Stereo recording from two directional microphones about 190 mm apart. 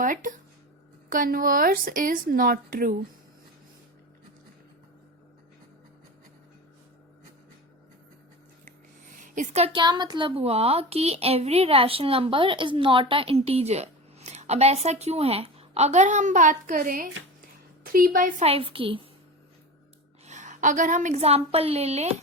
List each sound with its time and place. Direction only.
0.0 s a woman's voice: 45° right (ahead or behind)
8.6 s a woman's voice: 45° right (ahead or behind)
18.4 s a woman's voice: 30° right (ahead or behind)
20.2 s a woman's voice: 35° right (ahead or behind)